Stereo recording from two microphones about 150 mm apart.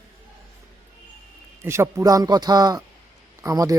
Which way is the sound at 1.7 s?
20° right (ahead or behind).